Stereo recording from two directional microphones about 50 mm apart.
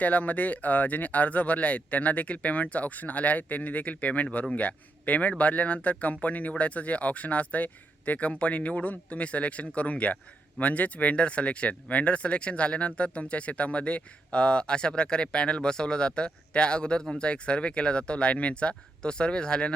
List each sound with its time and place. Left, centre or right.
0.0 s speech: left